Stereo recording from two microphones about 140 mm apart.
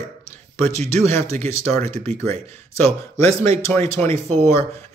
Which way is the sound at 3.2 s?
45° right (ahead or behind).